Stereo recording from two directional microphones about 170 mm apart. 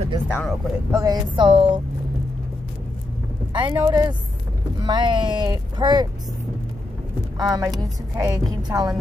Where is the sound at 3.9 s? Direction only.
25° right (ahead or behind).